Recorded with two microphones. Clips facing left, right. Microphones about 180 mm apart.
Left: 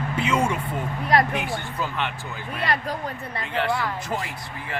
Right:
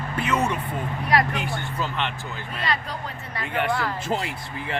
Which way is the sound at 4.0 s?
20° right (ahead or behind).